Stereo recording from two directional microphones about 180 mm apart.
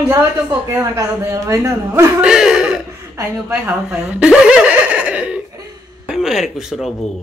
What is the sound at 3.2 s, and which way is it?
Speech, 5° right (ahead or behind).